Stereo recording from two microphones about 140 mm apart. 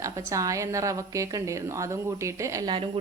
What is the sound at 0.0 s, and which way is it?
A woman's voice, 25° right (ahead or behind).